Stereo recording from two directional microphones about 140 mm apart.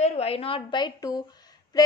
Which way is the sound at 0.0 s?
45° left (ahead or behind).